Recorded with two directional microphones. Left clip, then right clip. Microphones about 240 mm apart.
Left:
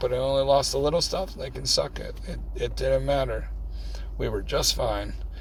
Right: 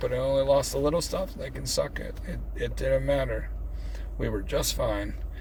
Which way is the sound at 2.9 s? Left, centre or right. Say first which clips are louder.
Left 1 dB; left.